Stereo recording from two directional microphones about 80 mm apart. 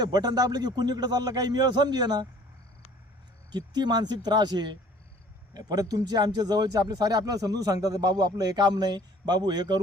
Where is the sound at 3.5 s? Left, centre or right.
Right.